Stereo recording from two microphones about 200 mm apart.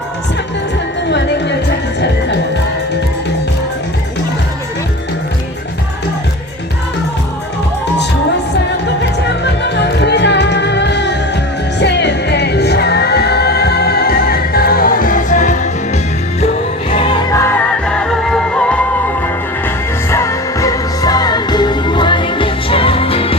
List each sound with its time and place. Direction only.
1.0 s music: 60° left (ahead or behind)
9.0 s music: 60° left (ahead or behind); by 15.5 s 40° left (ahead or behind)
16.9 s music: 25° left (ahead or behind)
17.4 s music: 5° left (ahead or behind); by 23.4 s 30° left (ahead or behind)